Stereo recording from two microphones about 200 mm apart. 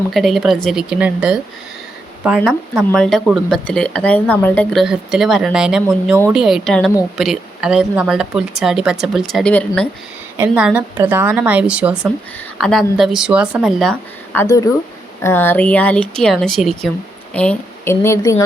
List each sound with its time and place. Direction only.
0.1 s speech: centre (ahead or behind)
10.3 s a woman's voice: 10° right (ahead or behind)
14.3 s speech: 15° left (ahead or behind)